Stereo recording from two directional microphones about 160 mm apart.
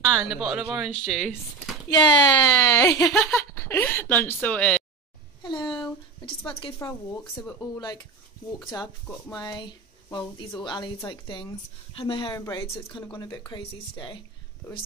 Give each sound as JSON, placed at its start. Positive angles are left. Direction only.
{"t": 0.1, "sound": "speech", "side_deg": 0}
{"t": 1.9, "sound": "speech", "side_deg": 30}
{"t": 5.4, "sound": "a sound", "side_deg": 30}
{"t": 5.7, "sound": "a sound", "side_deg": 5}
{"t": 6.2, "sound": "speech", "side_deg": 35}
{"t": 7.4, "sound": "speech", "side_deg": 20}
{"t": 9.3, "sound": "speech", "side_deg": 25}
{"t": 12.4, "sound": "speech", "side_deg": 20}